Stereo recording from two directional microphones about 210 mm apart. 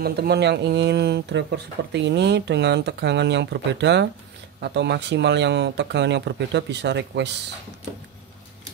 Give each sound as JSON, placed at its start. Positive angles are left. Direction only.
{"t": 0.0, "sound": "speech", "side_deg": -50}